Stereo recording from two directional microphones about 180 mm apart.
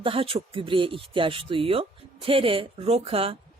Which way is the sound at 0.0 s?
30° right (ahead or behind).